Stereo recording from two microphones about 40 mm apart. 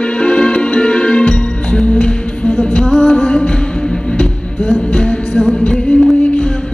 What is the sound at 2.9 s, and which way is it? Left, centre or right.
Music, centre.